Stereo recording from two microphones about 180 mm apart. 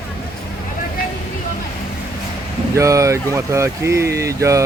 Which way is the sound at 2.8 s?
15° right (ahead or behind).